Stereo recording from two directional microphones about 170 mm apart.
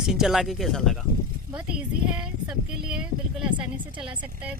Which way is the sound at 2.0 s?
5° right (ahead or behind).